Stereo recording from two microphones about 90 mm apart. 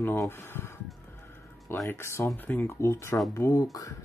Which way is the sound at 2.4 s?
20° left (ahead or behind).